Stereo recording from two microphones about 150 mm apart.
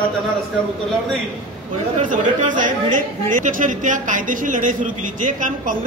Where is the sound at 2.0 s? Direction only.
60° right (ahead or behind).